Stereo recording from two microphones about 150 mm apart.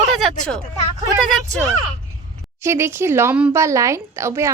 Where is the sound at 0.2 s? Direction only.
Centre (ahead or behind).